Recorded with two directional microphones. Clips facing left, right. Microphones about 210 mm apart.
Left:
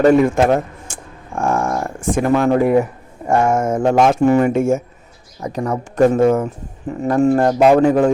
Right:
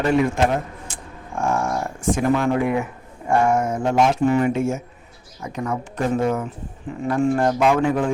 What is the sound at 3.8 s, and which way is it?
A man's voice, 55° left (ahead or behind).